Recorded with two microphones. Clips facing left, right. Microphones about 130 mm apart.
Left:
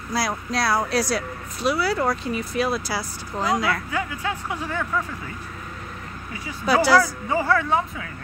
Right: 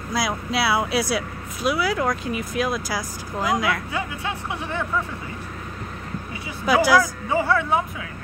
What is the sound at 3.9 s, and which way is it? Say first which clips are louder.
Speech: left 1 dB; 20° right (ahead or behind).